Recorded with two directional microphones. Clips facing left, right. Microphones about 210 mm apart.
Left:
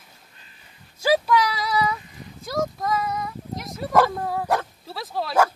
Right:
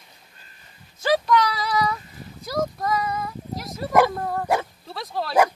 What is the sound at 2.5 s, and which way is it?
Dog, centre (ahead or behind).